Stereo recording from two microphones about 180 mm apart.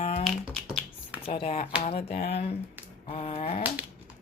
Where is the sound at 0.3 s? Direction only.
Centre (ahead or behind).